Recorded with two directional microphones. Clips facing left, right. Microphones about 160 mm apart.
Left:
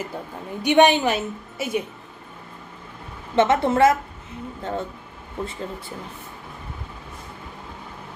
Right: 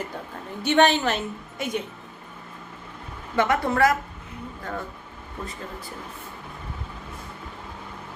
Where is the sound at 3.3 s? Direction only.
25° left (ahead or behind).